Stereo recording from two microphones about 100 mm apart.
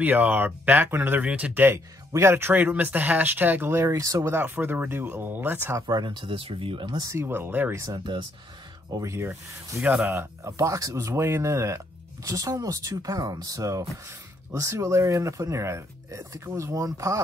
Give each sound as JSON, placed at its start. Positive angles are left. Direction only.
{"t": 0.0, "sound": "speech", "side_deg": -15}
{"t": 4.4, "sound": "speech", "side_deg": -20}
{"t": 5.8, "sound": "speech", "side_deg": -45}
{"t": 7.1, "sound": "speech", "side_deg": -25}
{"t": 7.7, "sound": "speech", "side_deg": -30}